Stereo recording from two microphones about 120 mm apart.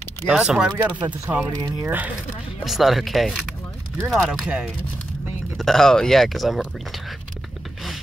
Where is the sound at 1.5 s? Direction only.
30° right (ahead or behind).